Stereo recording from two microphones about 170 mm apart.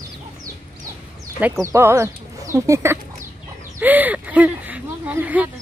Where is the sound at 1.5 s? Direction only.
20° right (ahead or behind).